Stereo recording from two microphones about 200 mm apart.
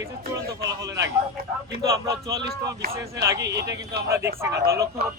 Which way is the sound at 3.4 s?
60° right (ahead or behind).